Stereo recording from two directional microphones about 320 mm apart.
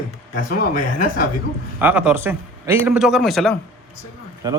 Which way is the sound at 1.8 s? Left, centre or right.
Centre.